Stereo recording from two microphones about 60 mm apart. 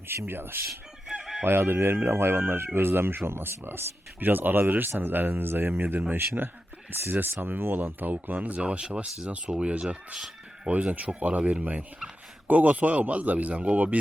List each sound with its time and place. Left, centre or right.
0.1 s speech: right
1.0 s chicken: centre
1.5 s speech: right; by 9.8 s centre
10.2 s a sound: centre
10.7 s speech: right